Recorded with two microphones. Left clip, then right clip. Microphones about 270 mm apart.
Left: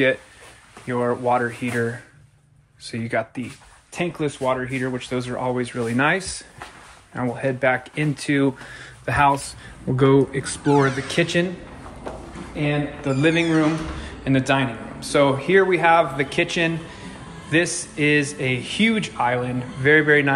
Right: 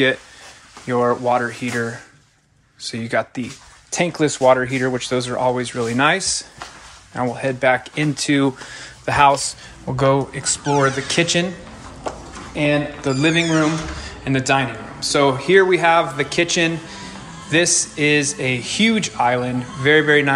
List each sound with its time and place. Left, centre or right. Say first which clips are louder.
0.8 s a man's voice: right 4 dB; centre
3.9 s a man's voice: right 6 dB; right
12.5 s a man's voice: right 6 dB; centre